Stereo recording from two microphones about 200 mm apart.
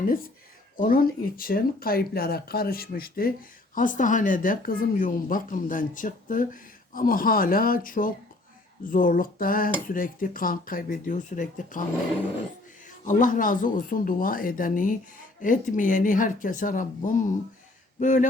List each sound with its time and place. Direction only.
0.8 s speech: 45° left (ahead or behind)
12.8 s speech: 40° left (ahead or behind)